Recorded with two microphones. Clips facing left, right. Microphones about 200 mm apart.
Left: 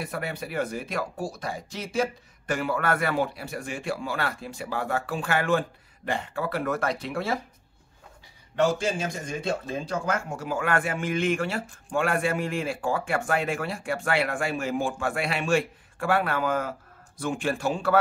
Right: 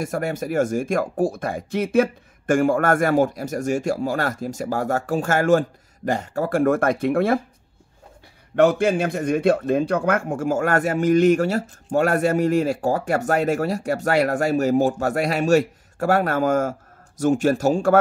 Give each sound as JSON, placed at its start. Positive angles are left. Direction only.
{"t": 0.0, "sound": "speech", "side_deg": -45}
{"t": 8.5, "sound": "speech", "side_deg": -60}